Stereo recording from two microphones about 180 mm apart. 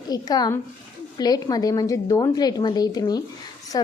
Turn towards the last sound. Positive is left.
turn(degrees=20)  # may be behind; listen again after turning